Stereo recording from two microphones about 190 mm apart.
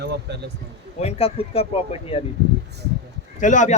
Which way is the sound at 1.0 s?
35° left (ahead or behind).